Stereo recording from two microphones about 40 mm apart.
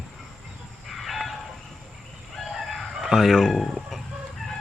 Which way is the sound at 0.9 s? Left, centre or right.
Centre.